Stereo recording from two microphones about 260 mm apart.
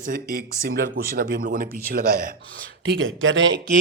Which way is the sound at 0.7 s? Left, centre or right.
Right.